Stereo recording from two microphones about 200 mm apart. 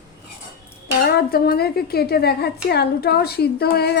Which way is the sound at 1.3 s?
50° left (ahead or behind).